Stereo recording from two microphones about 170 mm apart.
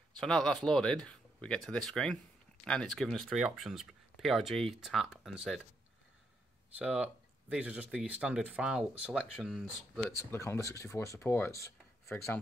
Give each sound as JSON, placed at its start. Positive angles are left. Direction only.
{"t": 0.2, "sound": "speech", "side_deg": 5}
{"t": 6.8, "sound": "speech", "side_deg": -5}
{"t": 10.3, "sound": "speech", "side_deg": 15}